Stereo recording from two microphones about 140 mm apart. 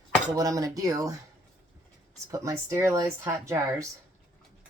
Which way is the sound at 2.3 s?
20° right (ahead or behind).